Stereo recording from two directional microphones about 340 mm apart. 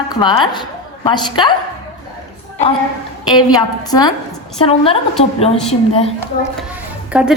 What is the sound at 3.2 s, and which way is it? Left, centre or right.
A woman's voice, centre.